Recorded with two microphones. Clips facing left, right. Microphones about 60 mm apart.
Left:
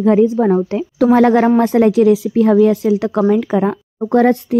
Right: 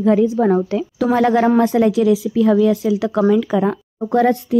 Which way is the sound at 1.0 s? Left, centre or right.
Left.